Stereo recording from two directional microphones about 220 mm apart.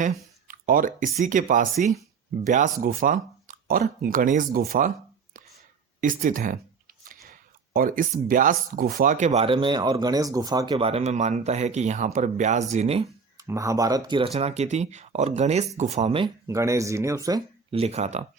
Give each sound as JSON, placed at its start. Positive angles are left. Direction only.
{"t": 0.0, "sound": "speech", "side_deg": -40}
{"t": 6.0, "sound": "speech", "side_deg": -35}
{"t": 7.3, "sound": "a sound", "side_deg": -40}
{"t": 8.3, "sound": "speech", "side_deg": -40}
{"t": 13.3, "sound": "speech", "side_deg": -15}